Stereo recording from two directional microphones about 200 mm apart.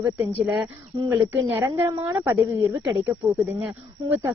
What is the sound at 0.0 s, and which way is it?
Speech, 10° right (ahead or behind).